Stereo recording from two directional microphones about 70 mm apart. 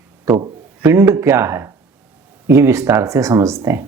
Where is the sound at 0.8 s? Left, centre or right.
Right.